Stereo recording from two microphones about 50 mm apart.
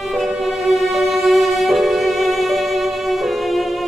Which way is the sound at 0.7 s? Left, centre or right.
Centre.